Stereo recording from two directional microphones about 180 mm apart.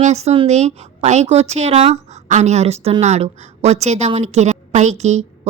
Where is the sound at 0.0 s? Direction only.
40° right (ahead or behind).